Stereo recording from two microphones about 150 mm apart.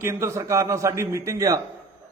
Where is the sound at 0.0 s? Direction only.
20° right (ahead or behind).